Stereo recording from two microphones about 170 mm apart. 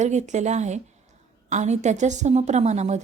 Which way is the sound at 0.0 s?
45° right (ahead or behind).